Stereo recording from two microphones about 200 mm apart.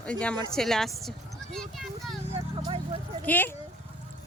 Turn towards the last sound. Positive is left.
turn(degrees=10)  # may be behind; listen again after turning